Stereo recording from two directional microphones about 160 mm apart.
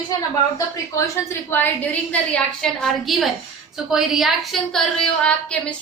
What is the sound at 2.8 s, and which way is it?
A woman's voice, centre (ahead or behind).